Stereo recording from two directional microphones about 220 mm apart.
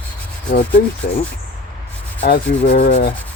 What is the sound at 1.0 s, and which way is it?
Rub, 45° left (ahead or behind).